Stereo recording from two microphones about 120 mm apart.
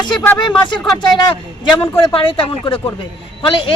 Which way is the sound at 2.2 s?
45° left (ahead or behind).